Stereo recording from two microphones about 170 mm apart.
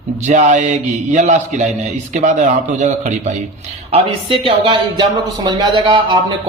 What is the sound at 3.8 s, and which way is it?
Speech, 35° right (ahead or behind).